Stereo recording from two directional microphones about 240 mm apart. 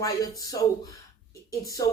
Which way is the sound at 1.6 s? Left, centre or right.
Centre.